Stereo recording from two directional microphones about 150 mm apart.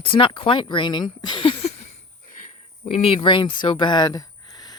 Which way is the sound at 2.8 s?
40° left (ahead or behind).